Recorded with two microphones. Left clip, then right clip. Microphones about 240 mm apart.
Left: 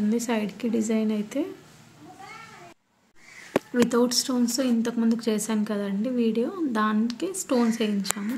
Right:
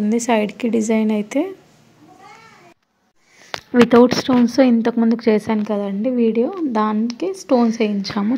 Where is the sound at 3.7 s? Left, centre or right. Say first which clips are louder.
Right 12 dB; right.